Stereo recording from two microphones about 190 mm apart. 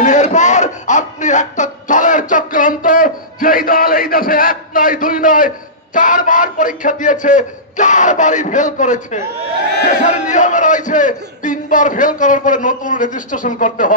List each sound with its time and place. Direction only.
0.0 s music: 40° left (ahead or behind)
5.9 s a man's voice: 45° left (ahead or behind)